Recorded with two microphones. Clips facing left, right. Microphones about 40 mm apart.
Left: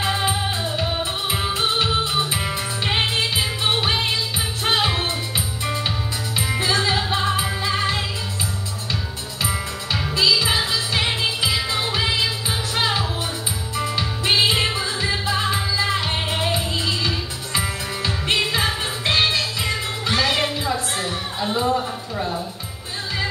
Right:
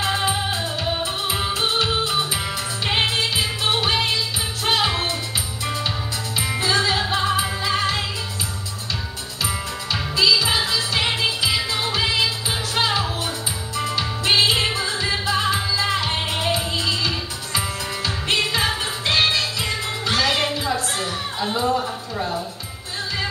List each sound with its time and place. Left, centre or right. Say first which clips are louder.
0.0 s music: even; centre
6.5 s music: right 1 dB; centre
7.2 s music: right 1 dB; centre
10.5 s music: even; centre